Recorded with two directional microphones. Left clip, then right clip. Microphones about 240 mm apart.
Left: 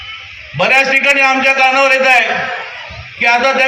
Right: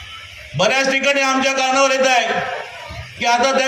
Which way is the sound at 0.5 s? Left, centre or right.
Right.